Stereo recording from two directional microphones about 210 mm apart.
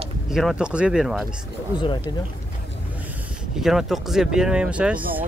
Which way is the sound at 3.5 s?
Centre (ahead or behind).